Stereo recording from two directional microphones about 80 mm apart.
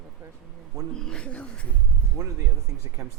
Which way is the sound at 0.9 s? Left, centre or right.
Centre.